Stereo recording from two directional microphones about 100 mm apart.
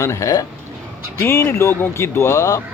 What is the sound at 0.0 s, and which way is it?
A man's voice, 35° left (ahead or behind).